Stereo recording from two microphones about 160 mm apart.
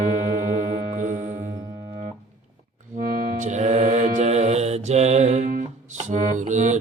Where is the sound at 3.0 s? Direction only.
50° right (ahead or behind).